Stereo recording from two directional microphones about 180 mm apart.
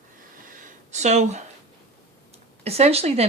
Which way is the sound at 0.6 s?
45° right (ahead or behind).